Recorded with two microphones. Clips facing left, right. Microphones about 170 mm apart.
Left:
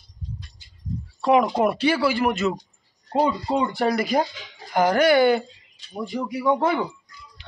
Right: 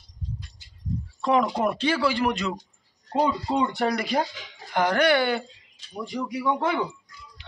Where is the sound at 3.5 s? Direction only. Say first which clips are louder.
Left 2 dB; centre (ahead or behind).